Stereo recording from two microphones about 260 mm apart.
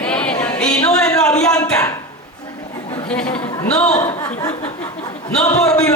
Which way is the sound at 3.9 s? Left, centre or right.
Centre.